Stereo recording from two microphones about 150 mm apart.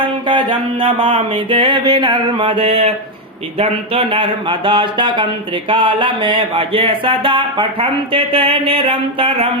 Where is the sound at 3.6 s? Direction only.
40° right (ahead or behind).